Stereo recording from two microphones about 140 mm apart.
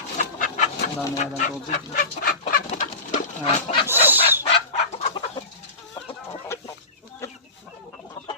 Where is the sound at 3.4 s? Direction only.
40° left (ahead or behind).